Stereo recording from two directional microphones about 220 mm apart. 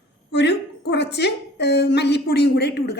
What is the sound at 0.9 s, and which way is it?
A woman's voice, 50° left (ahead or behind).